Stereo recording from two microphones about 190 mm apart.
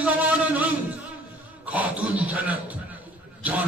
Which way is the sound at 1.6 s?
10° right (ahead or behind).